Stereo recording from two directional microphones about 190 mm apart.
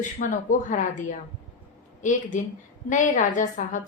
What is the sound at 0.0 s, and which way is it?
A woman's voice, 40° left (ahead or behind).